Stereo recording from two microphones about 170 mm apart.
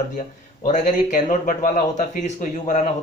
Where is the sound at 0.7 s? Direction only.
45° left (ahead or behind).